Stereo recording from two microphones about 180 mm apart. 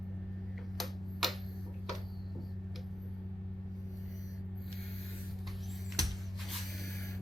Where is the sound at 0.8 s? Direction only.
Centre (ahead or behind).